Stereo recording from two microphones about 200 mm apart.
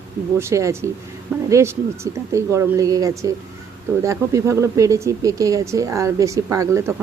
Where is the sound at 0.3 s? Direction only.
15° right (ahead or behind).